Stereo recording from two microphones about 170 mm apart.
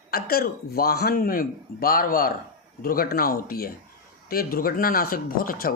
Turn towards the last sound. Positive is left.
turn(degrees=55)  # may be behind; listen again after turning